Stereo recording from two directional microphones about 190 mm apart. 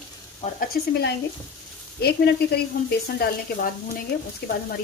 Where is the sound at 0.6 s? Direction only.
55° left (ahead or behind).